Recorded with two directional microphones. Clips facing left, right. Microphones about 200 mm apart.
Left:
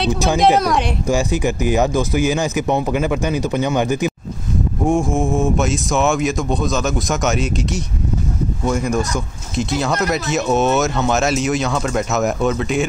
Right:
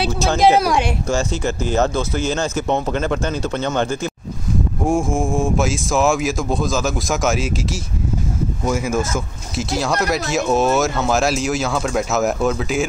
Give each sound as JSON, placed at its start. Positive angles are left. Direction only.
{"t": 0.1, "sound": "speech", "side_deg": 15}
{"t": 0.4, "sound": "speech", "side_deg": 0}
{"t": 1.0, "sound": "speech", "side_deg": 15}
{"t": 4.8, "sound": "speech", "side_deg": 0}